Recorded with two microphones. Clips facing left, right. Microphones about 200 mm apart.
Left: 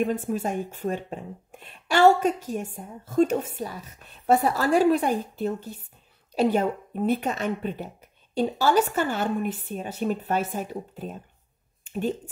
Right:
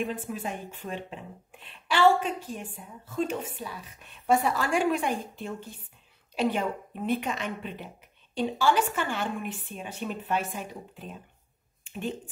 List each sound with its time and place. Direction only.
0.0 s speech: 40° left (ahead or behind)